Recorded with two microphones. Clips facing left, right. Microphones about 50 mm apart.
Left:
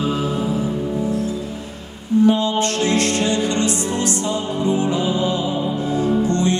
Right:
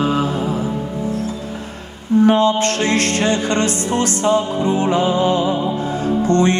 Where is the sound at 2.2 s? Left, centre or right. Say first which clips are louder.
Right 3 dB; right.